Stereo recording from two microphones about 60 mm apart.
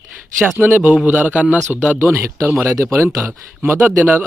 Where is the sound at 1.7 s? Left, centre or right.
Right.